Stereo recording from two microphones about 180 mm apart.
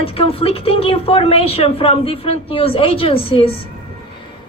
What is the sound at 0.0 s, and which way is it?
A woman's voice, 30° left (ahead or behind).